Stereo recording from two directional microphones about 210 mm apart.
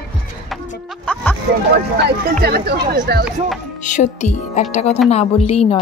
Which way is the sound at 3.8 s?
35° left (ahead or behind).